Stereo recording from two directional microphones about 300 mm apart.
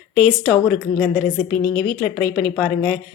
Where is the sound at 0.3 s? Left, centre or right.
Centre.